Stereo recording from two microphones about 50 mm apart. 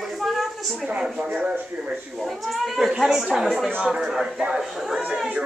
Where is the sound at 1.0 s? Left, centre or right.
Centre.